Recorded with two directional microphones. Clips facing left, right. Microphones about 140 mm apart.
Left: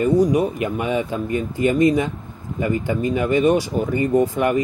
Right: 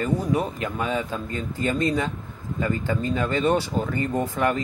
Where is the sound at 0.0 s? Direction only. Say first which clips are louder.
Left 7 dB; 15° left (ahead or behind).